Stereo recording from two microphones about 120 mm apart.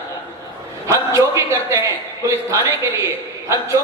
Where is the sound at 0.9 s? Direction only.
25° right (ahead or behind).